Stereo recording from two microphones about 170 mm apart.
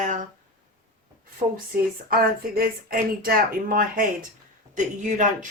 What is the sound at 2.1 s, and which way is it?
Speech, 60° right (ahead or behind).